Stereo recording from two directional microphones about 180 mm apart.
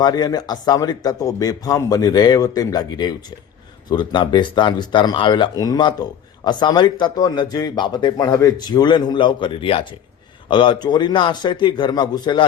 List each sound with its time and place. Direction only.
0.0 s speech: 20° left (ahead or behind)